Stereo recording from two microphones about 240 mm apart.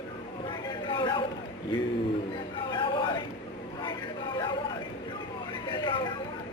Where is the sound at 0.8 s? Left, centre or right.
Centre.